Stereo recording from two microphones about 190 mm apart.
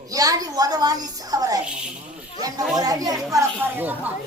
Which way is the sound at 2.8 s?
20° right (ahead or behind).